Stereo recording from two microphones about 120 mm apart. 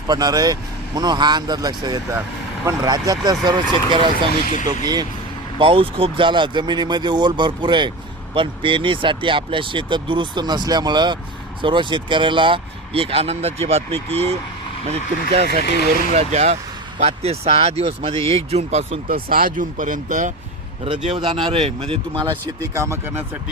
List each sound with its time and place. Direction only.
0.1 s speech: 35° right (ahead or behind)
4.4 s speech: 90° left
5.5 s speech: 50° right (ahead or behind)
19.5 s speech: 90° right
21.2 s speech: 40° right (ahead or behind)
22.7 s speech: 25° right (ahead or behind)